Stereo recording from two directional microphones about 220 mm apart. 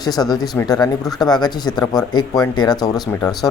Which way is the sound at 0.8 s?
Centre (ahead or behind).